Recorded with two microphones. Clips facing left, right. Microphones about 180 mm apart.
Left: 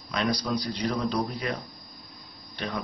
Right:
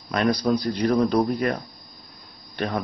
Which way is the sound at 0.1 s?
55° right (ahead or behind).